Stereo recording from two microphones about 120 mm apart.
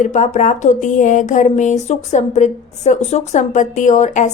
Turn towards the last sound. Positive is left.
turn(degrees=85)